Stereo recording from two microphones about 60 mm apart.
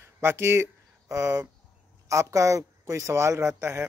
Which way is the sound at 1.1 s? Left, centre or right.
Right.